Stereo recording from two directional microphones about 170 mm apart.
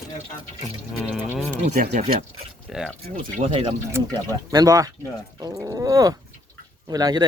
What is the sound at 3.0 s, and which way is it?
Speech, 55° right (ahead or behind).